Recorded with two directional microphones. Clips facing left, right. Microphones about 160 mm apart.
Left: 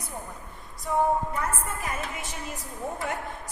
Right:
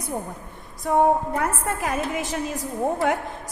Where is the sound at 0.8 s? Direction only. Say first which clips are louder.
Right 5 dB; 60° right (ahead or behind).